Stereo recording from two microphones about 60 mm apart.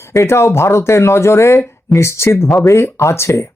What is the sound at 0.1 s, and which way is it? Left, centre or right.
Speech, left.